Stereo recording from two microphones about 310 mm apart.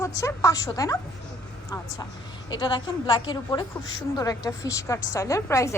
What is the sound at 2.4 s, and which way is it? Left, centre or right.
A woman's voice, centre.